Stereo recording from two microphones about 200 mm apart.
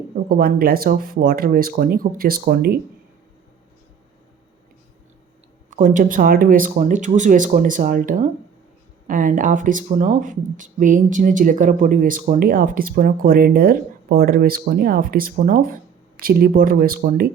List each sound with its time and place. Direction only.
0.3 s speech: 50° right (ahead or behind)
5.7 s speech: 40° right (ahead or behind)